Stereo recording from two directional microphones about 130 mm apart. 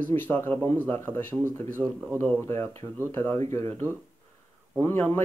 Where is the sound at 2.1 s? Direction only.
20° left (ahead or behind).